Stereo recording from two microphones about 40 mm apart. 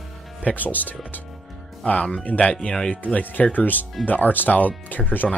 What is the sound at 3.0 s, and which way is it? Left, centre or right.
Speech, left.